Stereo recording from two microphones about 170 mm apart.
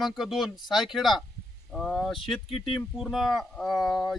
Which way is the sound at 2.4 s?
30° left (ahead or behind).